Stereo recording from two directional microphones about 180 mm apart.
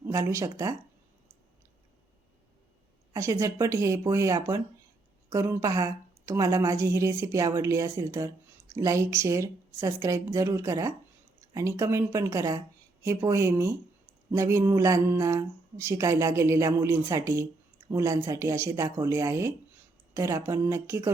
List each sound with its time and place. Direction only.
0.0 s speech: 15° right (ahead or behind)
3.1 s speech: 15° right (ahead or behind)